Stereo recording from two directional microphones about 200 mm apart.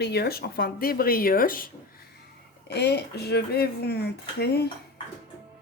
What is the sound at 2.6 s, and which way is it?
A woman's voice, 55° left (ahead or behind).